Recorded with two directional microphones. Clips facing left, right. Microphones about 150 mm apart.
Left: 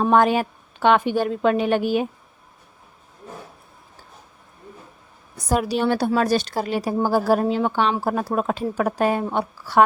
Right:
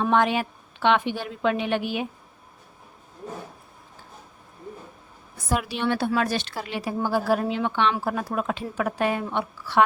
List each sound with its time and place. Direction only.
0.0 s a woman's voice: 40° left (ahead or behind)
5.5 s speech: 40° left (ahead or behind)